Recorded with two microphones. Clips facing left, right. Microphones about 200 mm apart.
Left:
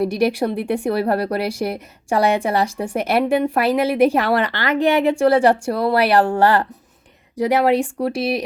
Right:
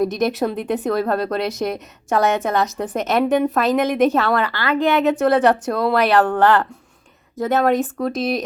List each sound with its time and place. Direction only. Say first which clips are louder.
0.0 s a woman's voice: left 1 dB; 10° left (ahead or behind)